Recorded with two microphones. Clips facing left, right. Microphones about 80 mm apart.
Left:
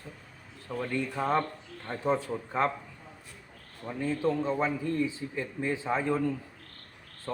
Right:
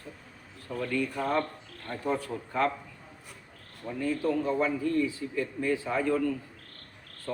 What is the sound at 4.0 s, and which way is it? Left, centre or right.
A man's voice, left.